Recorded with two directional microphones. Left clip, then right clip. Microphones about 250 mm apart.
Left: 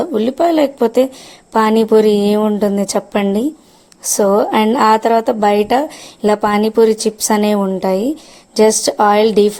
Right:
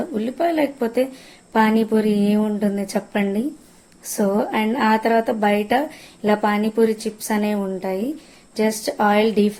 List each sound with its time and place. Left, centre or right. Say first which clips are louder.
0.0 s speech: left 8 dB; left